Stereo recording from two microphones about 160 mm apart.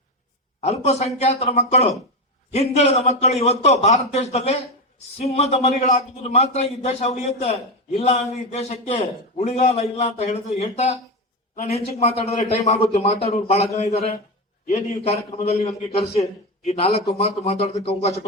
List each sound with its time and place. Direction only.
0.6 s a man's voice: 40° left (ahead or behind)